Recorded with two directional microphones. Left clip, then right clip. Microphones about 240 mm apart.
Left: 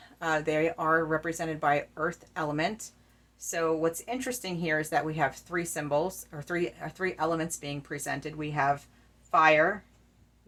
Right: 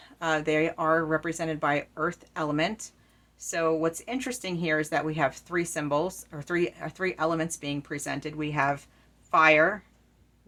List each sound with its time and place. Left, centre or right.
0.2 s speech: right